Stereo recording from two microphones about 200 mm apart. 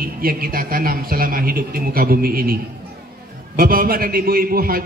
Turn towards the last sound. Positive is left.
turn(degrees=-45)  # may be behind; listen again after turning